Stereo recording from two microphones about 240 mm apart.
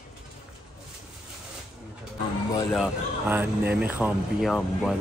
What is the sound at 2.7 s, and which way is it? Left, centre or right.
Speech, centre.